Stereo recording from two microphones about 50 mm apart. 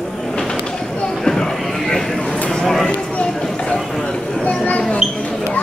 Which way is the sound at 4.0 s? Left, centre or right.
Centre.